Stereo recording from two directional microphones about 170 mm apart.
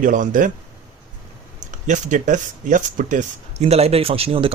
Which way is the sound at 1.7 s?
45° right (ahead or behind).